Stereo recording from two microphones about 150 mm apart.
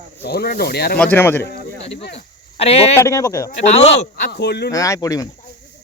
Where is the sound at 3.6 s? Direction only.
45° left (ahead or behind).